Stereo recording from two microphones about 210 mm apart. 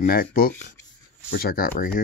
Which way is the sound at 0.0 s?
45° left (ahead or behind).